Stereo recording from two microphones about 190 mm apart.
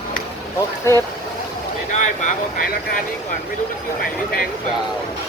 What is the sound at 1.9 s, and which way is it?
Speech, 40° left (ahead or behind).